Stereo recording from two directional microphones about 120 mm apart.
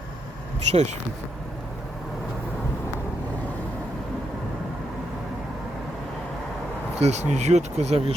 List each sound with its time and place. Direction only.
0.7 s speech: 70° right (ahead or behind)
7.0 s speech: 70° right (ahead or behind)